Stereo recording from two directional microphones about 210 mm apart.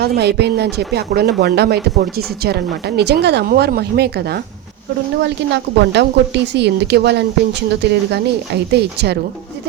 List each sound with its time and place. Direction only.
0.0 s speech: 50° right (ahead or behind)
5.7 s speech: 55° right (ahead or behind)